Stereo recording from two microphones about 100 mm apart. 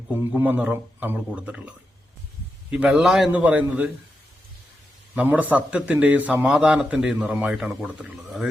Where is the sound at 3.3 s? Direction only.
15° right (ahead or behind).